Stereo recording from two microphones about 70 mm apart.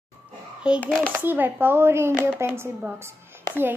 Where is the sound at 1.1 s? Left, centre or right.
Right.